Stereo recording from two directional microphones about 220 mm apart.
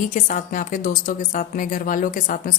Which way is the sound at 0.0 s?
35° left (ahead or behind).